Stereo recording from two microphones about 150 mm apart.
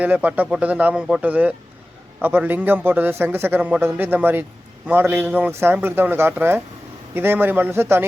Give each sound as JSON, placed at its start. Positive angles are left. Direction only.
{"t": 0.0, "sound": "a man's voice", "side_deg": -10}